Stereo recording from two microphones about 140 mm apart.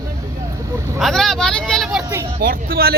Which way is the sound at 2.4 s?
90° right.